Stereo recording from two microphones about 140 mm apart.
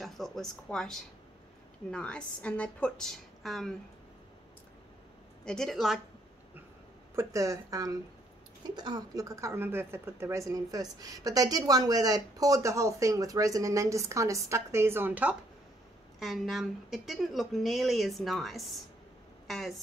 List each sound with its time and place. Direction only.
0.0 s a woman's voice: centre (ahead or behind)
5.4 s a woman's voice: 5° left (ahead or behind)
7.2 s a woman's voice: 25° right (ahead or behind)
16.2 s a woman's voice: centre (ahead or behind)